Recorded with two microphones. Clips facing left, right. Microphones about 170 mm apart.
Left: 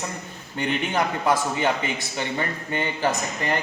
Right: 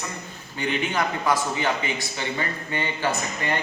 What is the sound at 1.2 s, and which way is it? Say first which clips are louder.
Speech: left 1 dB; 50° left (ahead or behind).